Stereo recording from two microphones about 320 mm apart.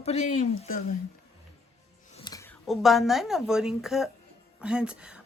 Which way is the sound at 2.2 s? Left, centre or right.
Centre.